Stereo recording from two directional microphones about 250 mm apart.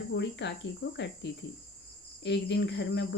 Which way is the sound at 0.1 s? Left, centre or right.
Left.